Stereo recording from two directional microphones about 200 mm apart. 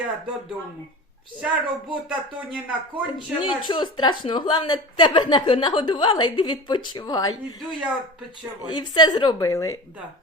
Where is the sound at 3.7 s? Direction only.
20° left (ahead or behind).